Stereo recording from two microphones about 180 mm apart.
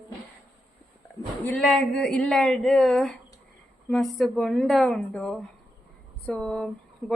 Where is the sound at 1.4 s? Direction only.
5° left (ahead or behind).